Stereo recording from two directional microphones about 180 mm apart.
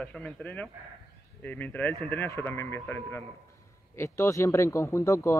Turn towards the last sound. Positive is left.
turn(degrees=15)  # may be behind; listen again after turning